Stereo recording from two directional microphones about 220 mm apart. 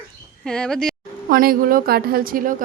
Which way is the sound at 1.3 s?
40° right (ahead or behind).